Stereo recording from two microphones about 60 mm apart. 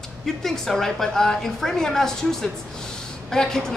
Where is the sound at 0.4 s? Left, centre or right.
Centre.